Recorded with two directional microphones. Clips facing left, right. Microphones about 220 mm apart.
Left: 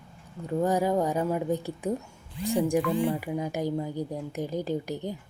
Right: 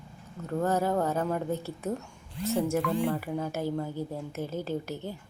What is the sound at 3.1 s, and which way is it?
A woman's voice, 15° left (ahead or behind).